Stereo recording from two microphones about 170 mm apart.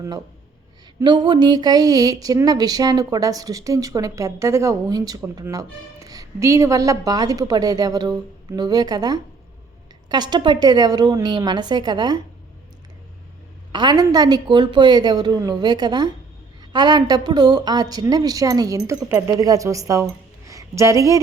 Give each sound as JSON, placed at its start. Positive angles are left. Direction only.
{"t": 1.0, "sound": "speech", "side_deg": -25}
{"t": 13.7, "sound": "speech", "side_deg": -25}